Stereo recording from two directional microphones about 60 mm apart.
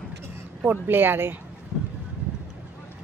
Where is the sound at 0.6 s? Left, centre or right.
Right.